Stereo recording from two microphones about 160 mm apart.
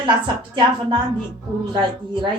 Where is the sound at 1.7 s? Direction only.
30° right (ahead or behind).